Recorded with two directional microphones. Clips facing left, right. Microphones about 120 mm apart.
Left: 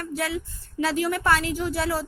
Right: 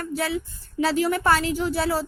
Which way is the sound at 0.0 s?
30° right (ahead or behind).